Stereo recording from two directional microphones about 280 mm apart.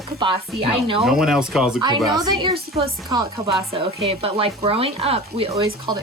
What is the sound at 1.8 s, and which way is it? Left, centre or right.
Speech, centre.